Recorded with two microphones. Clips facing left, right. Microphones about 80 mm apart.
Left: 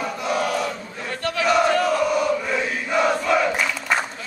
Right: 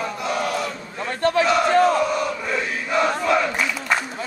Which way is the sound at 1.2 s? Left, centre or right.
Right.